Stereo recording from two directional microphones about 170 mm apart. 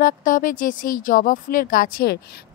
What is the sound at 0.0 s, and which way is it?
Speech, 55° left (ahead or behind).